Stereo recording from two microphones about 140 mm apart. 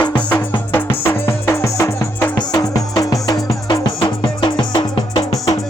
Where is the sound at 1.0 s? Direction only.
15° left (ahead or behind).